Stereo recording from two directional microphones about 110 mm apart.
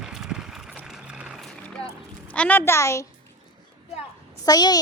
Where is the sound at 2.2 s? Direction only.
10° left (ahead or behind).